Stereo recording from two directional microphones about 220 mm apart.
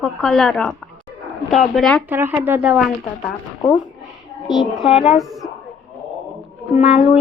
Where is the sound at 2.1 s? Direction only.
10° right (ahead or behind).